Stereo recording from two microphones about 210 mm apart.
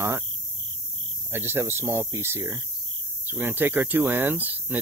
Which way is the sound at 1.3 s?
10° right (ahead or behind).